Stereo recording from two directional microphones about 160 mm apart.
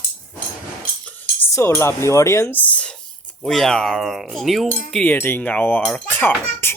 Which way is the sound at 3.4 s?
Centre (ahead or behind).